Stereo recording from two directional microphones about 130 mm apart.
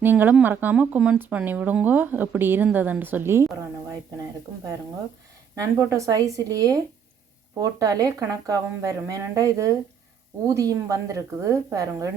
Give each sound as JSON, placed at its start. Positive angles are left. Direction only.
{"t": 0.0, "sound": "speech", "side_deg": -15}
{"t": 5.5, "sound": "speech", "side_deg": -25}